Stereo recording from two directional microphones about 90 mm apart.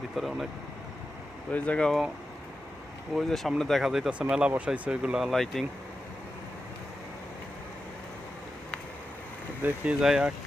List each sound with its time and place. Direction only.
0.2 s speech: centre (ahead or behind)
1.5 s speech: 15° left (ahead or behind)
3.2 s speech: centre (ahead or behind)
5.3 s speech: 5° left (ahead or behind)
9.6 s speech: 20° right (ahead or behind)
10.0 s speech: 5° right (ahead or behind)